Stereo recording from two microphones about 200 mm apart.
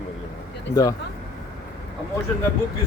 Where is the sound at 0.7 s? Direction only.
20° left (ahead or behind).